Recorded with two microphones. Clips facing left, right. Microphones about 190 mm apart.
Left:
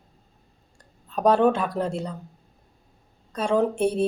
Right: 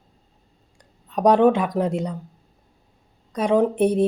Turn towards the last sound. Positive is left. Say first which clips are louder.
# right 4 dB
turn(degrees=-15)  # may be behind; listen again after turning